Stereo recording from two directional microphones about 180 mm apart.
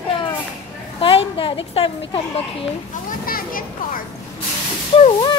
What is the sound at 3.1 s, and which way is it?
Children playing, 50° left (ahead or behind).